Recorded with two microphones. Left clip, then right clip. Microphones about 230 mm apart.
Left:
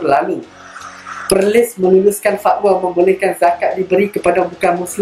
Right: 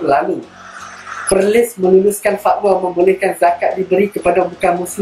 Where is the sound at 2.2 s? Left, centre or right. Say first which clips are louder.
Left 1 dB; left.